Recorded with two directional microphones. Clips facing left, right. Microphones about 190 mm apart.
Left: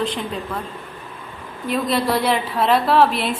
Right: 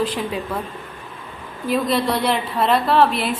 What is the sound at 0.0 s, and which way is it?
Speech, 5° right (ahead or behind).